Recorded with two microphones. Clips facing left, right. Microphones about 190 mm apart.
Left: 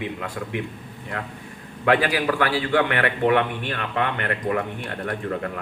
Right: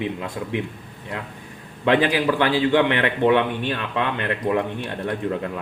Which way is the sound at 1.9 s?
25° right (ahead or behind).